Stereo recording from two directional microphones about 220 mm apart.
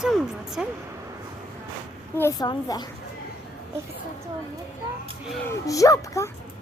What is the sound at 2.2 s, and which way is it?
Child singing, 15° left (ahead or behind).